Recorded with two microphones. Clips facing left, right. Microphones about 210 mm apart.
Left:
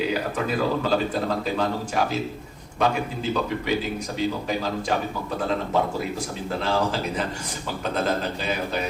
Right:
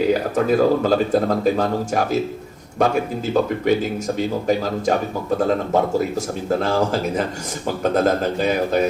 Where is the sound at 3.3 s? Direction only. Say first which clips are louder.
Right 8 dB; 45° right (ahead or behind).